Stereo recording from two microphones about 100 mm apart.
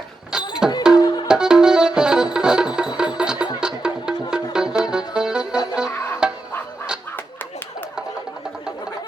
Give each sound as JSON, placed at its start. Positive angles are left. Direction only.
{"t": 0.3, "sound": "music", "side_deg": -5}
{"t": 0.9, "sound": "music", "side_deg": 40}
{"t": 1.3, "sound": "music", "side_deg": -5}